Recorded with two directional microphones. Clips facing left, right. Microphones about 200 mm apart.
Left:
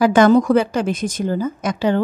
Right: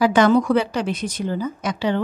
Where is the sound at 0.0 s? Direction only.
45° left (ahead or behind).